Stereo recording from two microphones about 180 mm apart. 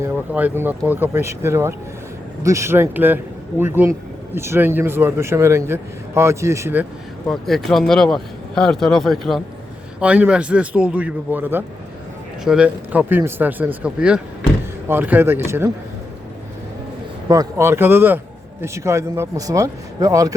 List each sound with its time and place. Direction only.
0.0 s a man's voice: 10° right (ahead or behind)
7.3 s a man's voice: centre (ahead or behind); by 15.7 s 15° right (ahead or behind)
17.2 s a man's voice: 15° right (ahead or behind)